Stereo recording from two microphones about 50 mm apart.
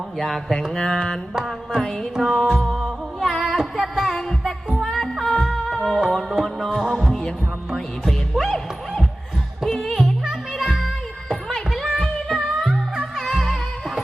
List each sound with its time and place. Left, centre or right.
0.2 s music: centre
0.8 s a sound: centre
2.1 s music: centre
6.3 s music: centre
6.9 s heart sounds: centre
8.0 s music: centre
9.6 s music: centre